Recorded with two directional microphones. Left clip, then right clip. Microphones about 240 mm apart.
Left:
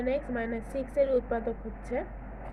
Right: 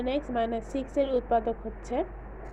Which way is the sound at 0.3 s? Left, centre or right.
Centre.